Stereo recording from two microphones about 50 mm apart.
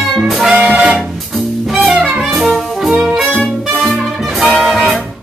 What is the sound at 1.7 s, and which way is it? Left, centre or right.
Music, centre.